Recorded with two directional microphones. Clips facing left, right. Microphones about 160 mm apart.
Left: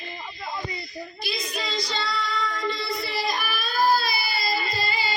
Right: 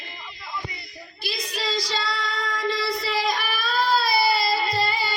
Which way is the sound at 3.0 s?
85° right.